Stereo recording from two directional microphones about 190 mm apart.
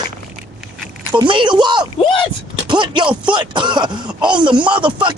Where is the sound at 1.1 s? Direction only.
25° right (ahead or behind).